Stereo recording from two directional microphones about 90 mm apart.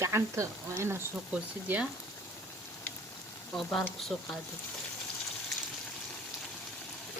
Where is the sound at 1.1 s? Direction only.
15° right (ahead or behind).